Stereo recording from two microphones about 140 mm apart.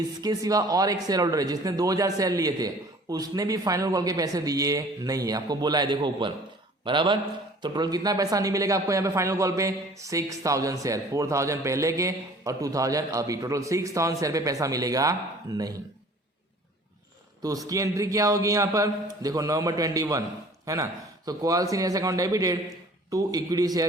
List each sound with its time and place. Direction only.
0.2 s a man's voice: 25° right (ahead or behind)
17.7 s a man's voice: 25° right (ahead or behind)